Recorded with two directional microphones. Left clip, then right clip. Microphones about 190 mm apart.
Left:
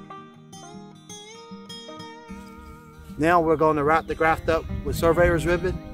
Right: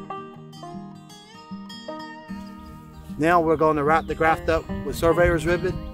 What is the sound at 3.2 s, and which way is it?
Speech, centre (ahead or behind).